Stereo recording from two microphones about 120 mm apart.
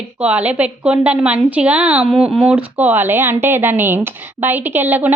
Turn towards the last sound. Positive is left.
turn(degrees=-15)  # may be behind; listen again after turning